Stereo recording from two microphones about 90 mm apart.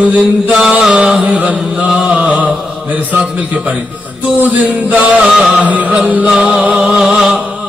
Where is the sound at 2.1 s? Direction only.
15° right (ahead or behind).